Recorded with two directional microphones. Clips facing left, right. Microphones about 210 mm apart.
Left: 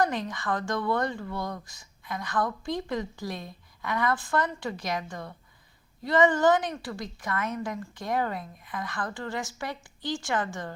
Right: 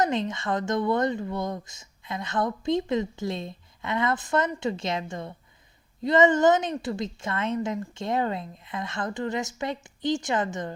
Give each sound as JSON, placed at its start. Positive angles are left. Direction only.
{"t": 0.0, "sound": "speech", "side_deg": -25}